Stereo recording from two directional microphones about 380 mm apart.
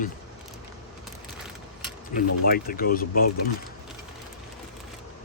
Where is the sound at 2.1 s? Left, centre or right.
Left.